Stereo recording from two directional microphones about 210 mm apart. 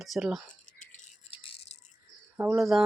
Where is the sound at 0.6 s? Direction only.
35° left (ahead or behind).